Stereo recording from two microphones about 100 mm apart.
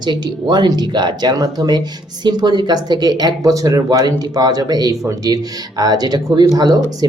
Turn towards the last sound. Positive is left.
turn(degrees=-40)  # may be behind; listen again after turning